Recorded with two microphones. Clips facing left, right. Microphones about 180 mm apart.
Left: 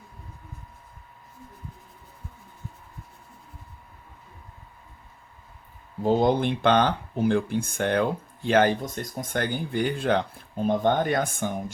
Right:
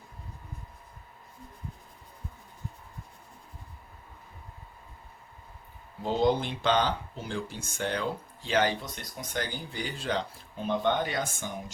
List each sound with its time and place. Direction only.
6.0 s speech: 50° left (ahead or behind)